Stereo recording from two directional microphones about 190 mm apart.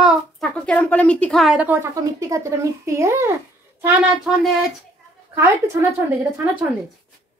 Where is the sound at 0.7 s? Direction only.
5° left (ahead or behind); by 3.3 s 15° right (ahead or behind).